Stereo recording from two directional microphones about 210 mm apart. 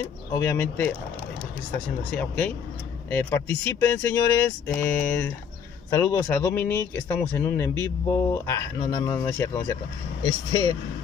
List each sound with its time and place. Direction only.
0.0 s speech: 10° left (ahead or behind)
2.0 s speech: 5° left (ahead or behind)